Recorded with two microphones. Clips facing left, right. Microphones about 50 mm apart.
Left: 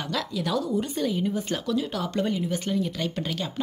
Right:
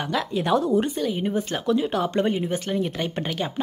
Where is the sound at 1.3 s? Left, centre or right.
Right.